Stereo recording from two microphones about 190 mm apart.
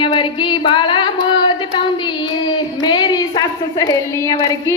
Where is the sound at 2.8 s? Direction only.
20° left (ahead or behind).